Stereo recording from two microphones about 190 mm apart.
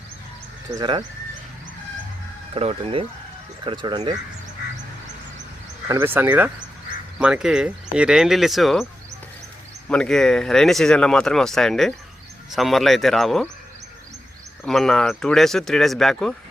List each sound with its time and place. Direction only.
0.8 s speech: 25° right (ahead or behind)
2.6 s speech: 30° right (ahead or behind)
5.9 s speech: 15° right (ahead or behind)
9.9 s speech: 5° left (ahead or behind)
14.6 s speech: centre (ahead or behind)